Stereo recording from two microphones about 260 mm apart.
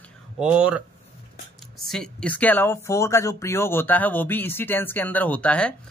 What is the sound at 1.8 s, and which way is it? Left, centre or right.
Speech, centre.